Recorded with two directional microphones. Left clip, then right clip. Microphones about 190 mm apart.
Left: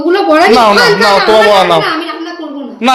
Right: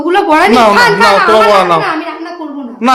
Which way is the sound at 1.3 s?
5° right (ahead or behind).